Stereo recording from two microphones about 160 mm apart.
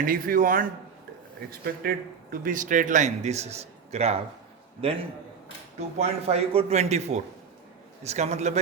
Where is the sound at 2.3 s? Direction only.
60° right (ahead or behind); by 4.2 s 40° right (ahead or behind).